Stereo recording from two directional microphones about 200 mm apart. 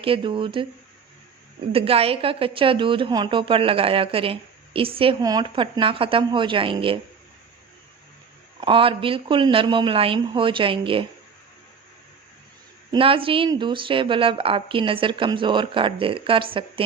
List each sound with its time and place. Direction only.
0.0 s a woman's voice: 25° right (ahead or behind)
1.7 s a woman's voice: 30° right (ahead or behind)
8.6 s a woman's voice: 25° right (ahead or behind)
12.9 s a woman's voice: 25° right (ahead or behind)